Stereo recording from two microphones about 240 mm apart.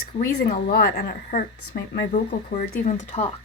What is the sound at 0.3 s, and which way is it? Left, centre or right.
A woman's voice, left.